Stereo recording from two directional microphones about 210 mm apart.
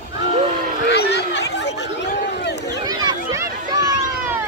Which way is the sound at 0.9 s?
55° left (ahead or behind).